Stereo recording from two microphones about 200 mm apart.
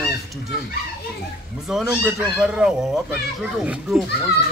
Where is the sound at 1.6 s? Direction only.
Centre (ahead or behind).